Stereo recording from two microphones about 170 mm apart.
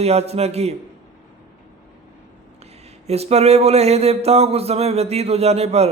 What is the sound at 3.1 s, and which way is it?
Speech, 40° right (ahead or behind).